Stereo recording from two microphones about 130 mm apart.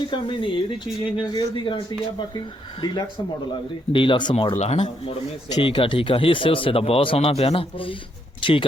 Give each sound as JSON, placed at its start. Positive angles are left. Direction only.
{"t": 0.1, "sound": "speech", "side_deg": 40}
{"t": 4.5, "sound": "speech", "side_deg": 55}